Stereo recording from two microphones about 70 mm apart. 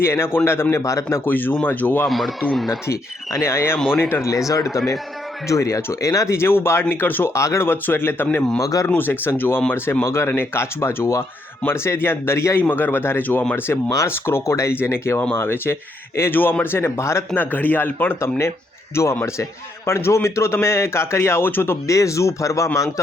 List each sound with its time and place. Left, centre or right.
0.0 s speech: left
0.8 s speech: left
1.2 s speech: left
2.0 s speech: centre
2.8 s speech: left
4.3 s speech: left
7.3 s speech: left
8.5 s speech: left
8.9 s speech: left
12.6 s speech: left
17.3 s speech: left
21.8 s speech: left